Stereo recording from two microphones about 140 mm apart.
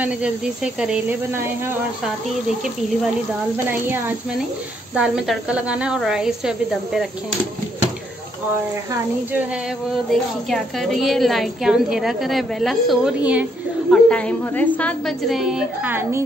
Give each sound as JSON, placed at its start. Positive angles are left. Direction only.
{"t": 0.0, "sound": "speech", "side_deg": -5}
{"t": 1.3, "sound": "speech", "side_deg": -15}
{"t": 3.8, "sound": "speech", "side_deg": -15}
{"t": 4.9, "sound": "a woman's voice", "side_deg": -5}
{"t": 10.5, "sound": "a woman's voice", "side_deg": 0}
{"t": 13.8, "sound": "a woman's voice", "side_deg": 5}
{"t": 15.8, "sound": "speech", "side_deg": -15}